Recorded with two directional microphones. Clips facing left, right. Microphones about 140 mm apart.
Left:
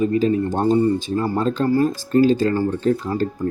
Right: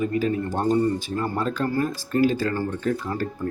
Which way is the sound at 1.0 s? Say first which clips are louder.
Left 5 dB; 25° left (ahead or behind).